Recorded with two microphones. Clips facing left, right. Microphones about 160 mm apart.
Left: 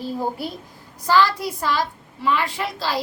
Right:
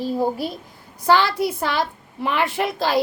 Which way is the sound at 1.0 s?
65° right (ahead or behind).